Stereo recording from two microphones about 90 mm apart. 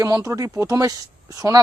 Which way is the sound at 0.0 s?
35° right (ahead or behind).